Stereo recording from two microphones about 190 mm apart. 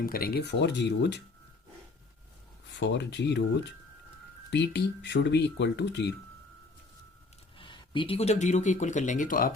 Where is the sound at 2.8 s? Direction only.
65° left (ahead or behind).